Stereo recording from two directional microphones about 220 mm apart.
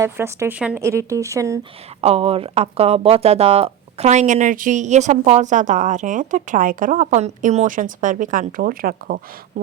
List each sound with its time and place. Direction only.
0.0 s speech: 10° right (ahead or behind)
2.0 s speech: 25° right (ahead or behind); by 9.2 s 40° right (ahead or behind)